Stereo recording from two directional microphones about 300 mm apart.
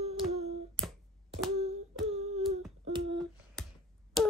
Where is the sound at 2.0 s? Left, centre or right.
Right.